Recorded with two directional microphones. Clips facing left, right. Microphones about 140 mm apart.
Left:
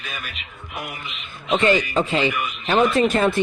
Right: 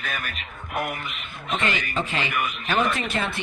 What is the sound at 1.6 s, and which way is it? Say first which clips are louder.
Speech: left 9 dB; 35° left (ahead or behind).